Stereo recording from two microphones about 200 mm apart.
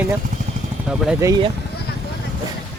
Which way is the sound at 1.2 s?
20° right (ahead or behind).